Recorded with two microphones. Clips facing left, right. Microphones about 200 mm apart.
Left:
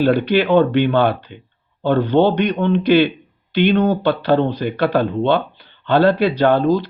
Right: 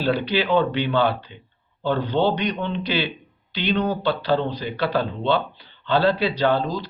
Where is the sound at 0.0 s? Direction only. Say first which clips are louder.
Left 7 dB; 55° left (ahead or behind).